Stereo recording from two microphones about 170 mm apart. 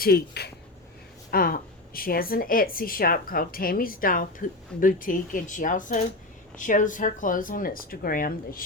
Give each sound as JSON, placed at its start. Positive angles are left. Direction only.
{"t": 0.0, "sound": "a woman's voice", "side_deg": 70}